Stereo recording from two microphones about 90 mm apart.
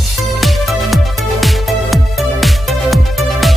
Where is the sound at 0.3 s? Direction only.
Centre (ahead or behind).